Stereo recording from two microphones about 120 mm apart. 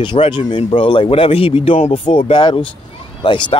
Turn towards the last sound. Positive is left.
turn(degrees=40)  # may be behind; listen again after turning